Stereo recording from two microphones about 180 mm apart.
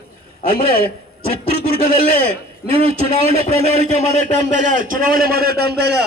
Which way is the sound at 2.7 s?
35° right (ahead or behind).